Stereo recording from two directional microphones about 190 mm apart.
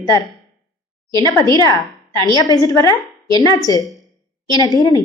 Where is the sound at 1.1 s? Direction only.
20° left (ahead or behind).